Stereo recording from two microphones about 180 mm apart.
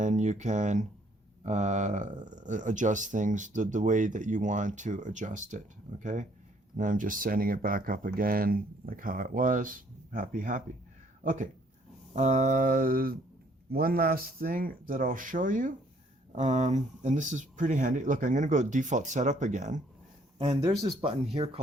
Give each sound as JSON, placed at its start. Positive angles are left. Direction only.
{"t": 0.0, "sound": "speech", "side_deg": -40}
{"t": 20.4, "sound": "speech", "side_deg": -35}